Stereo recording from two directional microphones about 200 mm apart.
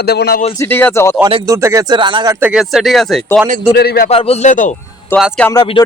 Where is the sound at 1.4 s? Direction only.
15° right (ahead or behind).